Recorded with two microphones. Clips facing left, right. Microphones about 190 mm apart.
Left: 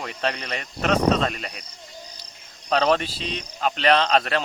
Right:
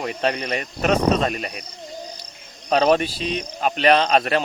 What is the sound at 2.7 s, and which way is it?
Speech, 15° right (ahead or behind).